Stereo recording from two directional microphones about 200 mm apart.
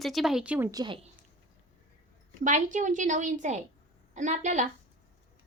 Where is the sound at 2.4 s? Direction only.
40° right (ahead or behind).